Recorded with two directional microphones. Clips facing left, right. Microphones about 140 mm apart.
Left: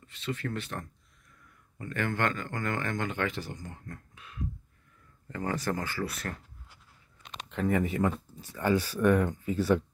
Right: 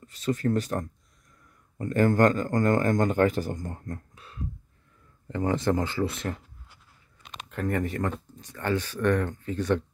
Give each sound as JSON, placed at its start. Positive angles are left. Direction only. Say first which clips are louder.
{"t": 0.0, "sound": "speech", "louder": "right 8 dB", "side_deg": -40}
{"t": 5.3, "sound": "speech", "louder": "right 6 dB", "side_deg": -20}
{"t": 7.4, "sound": "speech", "louder": "even", "side_deg": 0}